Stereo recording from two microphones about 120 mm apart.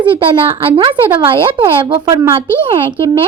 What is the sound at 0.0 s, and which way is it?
Speech, 45° right (ahead or behind).